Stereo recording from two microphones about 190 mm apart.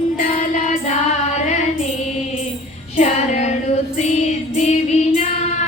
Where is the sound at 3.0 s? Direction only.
35° left (ahead or behind).